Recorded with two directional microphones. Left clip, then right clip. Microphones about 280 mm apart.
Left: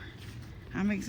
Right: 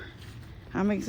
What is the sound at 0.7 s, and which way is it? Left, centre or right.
Speech, centre.